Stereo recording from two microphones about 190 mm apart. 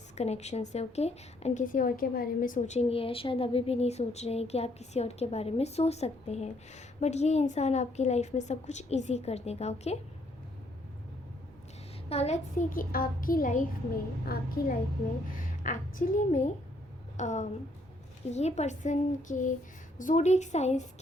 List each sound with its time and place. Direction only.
0.2 s a woman's voice: 35° left (ahead or behind)
12.0 s a child's voice: 35° left (ahead or behind)